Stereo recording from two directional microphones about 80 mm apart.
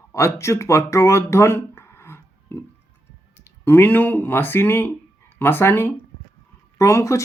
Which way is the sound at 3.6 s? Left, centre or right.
Left.